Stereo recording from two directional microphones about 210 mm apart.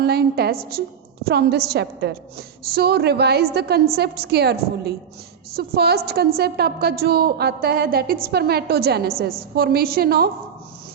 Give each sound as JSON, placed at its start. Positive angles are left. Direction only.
{"t": 0.0, "sound": "a woman's voice", "side_deg": -50}
{"t": 5.5, "sound": "a woman's voice", "side_deg": -50}